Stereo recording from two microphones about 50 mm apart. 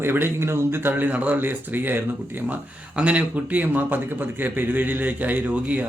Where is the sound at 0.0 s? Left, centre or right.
Right.